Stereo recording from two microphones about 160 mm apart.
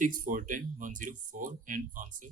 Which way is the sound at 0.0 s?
60° right (ahead or behind).